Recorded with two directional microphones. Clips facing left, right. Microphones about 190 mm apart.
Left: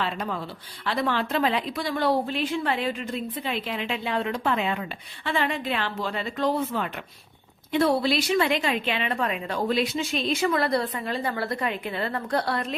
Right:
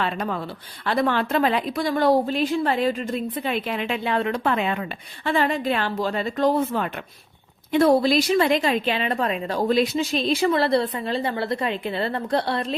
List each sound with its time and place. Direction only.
0.0 s a woman's voice: 55° right (ahead or behind)
5.2 s a woman's voice: 40° right (ahead or behind)